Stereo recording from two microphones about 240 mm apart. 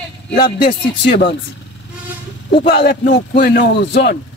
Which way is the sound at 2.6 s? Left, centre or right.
Left.